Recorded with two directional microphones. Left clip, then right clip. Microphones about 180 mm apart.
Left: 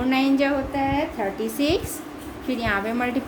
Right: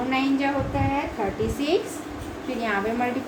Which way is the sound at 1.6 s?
65° left (ahead or behind).